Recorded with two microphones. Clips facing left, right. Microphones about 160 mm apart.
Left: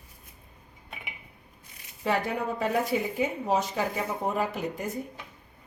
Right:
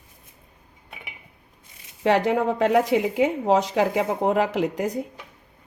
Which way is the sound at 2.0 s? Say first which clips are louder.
Right 8 dB; 90° right.